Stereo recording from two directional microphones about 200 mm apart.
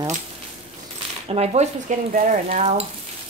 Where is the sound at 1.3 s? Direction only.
30° right (ahead or behind).